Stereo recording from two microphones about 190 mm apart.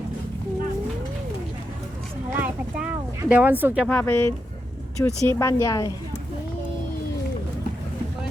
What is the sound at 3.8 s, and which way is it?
A woman's voice, 10° left (ahead or behind).